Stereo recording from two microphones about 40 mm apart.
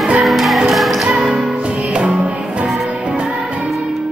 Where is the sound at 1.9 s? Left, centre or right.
Right.